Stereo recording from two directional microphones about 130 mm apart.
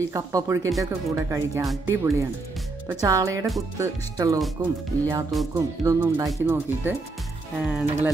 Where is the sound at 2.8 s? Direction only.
25° right (ahead or behind).